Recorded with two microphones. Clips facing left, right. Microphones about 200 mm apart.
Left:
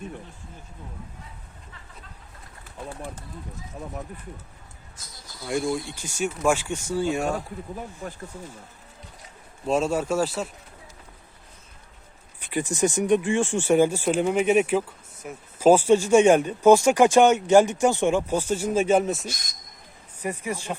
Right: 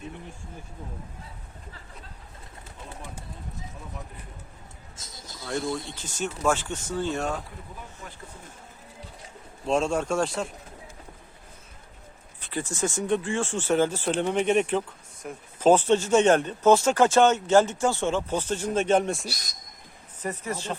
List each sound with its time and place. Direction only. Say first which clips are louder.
4.9 s a sound: right 2 dB; 25° right (ahead or behind)
6.0 s speech: left 3 dB; 10° left (ahead or behind)
8.0 s speech: left 9 dB; 40° left (ahead or behind)
9.6 s speech: left 1 dB; 5° left (ahead or behind)
12.4 s speech: left 5 dB; 15° left (ahead or behind)
19.3 s speech: left 1 dB; 35° right (ahead or behind)
20.1 s speech: left 2 dB; 10° left (ahead or behind)